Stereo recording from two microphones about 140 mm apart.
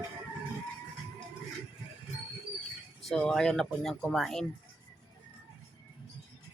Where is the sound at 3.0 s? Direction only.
5° left (ahead or behind).